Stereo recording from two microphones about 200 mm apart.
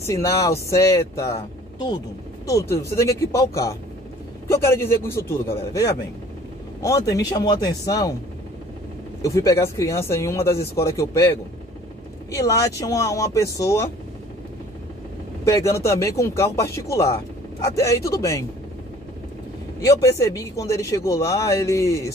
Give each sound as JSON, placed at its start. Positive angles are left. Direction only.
{"t": 0.0, "sound": "speech", "side_deg": 15}
{"t": 2.6, "sound": "speech", "side_deg": 55}
{"t": 2.9, "sound": "speech", "side_deg": 15}
{"t": 9.2, "sound": "speech", "side_deg": 15}
{"t": 15.4, "sound": "speech", "side_deg": 15}
{"t": 19.8, "sound": "speech", "side_deg": 15}